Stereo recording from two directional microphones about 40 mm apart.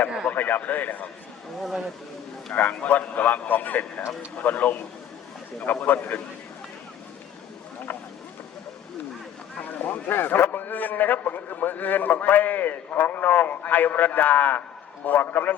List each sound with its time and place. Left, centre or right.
0.3 s a man's voice: left
2.5 s a man's voice: left
9.6 s a sound: left
10.6 s a man's voice: left